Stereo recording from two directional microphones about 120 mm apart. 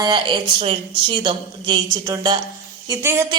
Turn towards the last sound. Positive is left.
turn(degrees=-20)  # may be behind; listen again after turning